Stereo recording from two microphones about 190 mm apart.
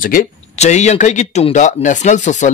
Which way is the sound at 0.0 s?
45° left (ahead or behind).